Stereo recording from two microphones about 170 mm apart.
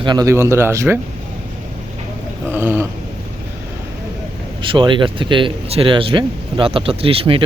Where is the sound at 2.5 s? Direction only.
10° right (ahead or behind).